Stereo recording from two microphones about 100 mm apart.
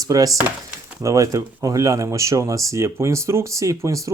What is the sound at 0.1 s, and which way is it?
Speech, 40° right (ahead or behind).